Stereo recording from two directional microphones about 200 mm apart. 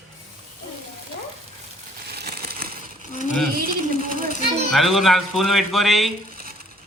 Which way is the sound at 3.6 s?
45° right (ahead or behind).